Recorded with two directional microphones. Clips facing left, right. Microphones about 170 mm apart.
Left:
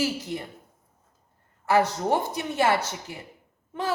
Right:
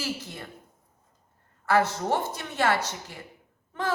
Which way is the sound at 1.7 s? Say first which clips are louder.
Left 2 dB; 15° left (ahead or behind).